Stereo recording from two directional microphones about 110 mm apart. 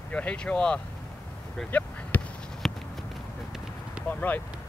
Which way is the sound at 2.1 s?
15° left (ahead or behind).